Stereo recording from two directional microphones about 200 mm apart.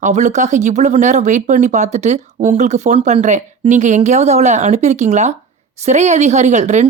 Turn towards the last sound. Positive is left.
turn(degrees=-35)  # may be behind; listen again after turning